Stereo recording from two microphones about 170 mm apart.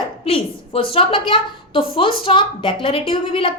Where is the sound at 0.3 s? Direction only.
30° left (ahead or behind).